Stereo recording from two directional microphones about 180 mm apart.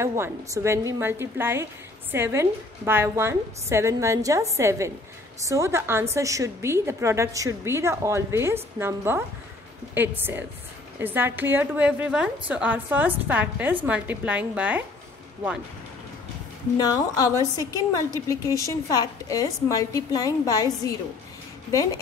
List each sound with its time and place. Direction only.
0.0 s a woman's voice: 15° right (ahead or behind)
16.7 s a woman's voice: 20° left (ahead or behind)